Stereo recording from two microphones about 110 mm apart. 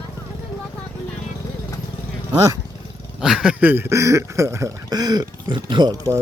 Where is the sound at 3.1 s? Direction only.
5° right (ahead or behind); by 6.0 s 45° right (ahead or behind).